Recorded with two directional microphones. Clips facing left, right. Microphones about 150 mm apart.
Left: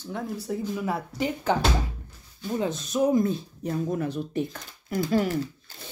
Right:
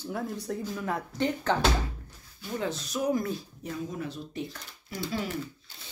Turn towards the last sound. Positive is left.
turn(degrees=50)  # may be behind; listen again after turning